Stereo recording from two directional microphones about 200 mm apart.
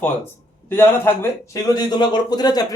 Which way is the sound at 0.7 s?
10° left (ahead or behind).